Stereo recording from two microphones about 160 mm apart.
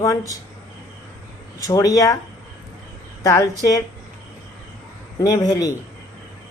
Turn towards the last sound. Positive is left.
turn(degrees=20)  # may be behind; listen again after turning